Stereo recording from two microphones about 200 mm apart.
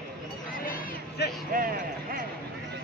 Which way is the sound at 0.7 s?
50° left (ahead or behind).